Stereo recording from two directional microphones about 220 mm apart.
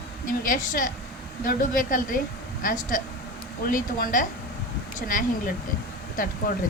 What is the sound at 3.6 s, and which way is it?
Speech, 40° left (ahead or behind).